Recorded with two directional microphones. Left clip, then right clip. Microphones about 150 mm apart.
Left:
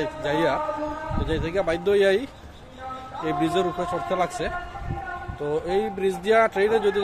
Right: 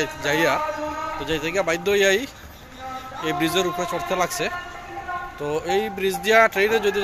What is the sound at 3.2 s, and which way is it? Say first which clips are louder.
Speech: right 1 dB; 5° left (ahead or behind).